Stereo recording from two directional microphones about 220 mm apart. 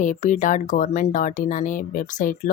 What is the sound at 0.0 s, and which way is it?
Speech, 35° left (ahead or behind).